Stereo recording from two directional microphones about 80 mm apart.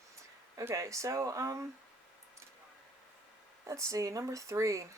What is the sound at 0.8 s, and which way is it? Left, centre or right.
Speech, right.